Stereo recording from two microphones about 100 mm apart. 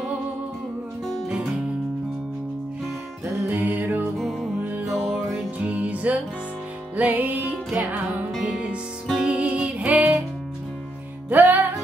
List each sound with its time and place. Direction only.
1.0 s music: 5° left (ahead or behind)
3.4 s music: 15° right (ahead or behind)
4.2 s music: centre (ahead or behind)
5.6 s music: 15° right (ahead or behind)
11.2 s music: 20° right (ahead or behind)